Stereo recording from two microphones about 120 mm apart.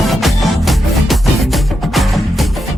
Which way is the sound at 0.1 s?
Centre (ahead or behind).